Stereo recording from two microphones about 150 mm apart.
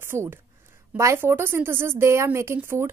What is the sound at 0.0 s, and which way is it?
A woman's voice, 15° right (ahead or behind).